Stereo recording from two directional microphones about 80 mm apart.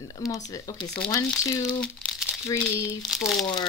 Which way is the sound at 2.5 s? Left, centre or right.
Left.